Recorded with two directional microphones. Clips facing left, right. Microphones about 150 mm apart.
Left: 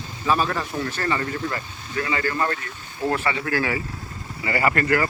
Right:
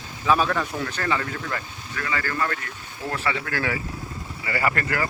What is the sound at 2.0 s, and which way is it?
Speech, 25° left (ahead or behind).